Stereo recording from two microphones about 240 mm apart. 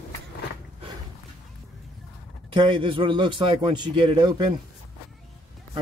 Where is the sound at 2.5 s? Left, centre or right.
Right.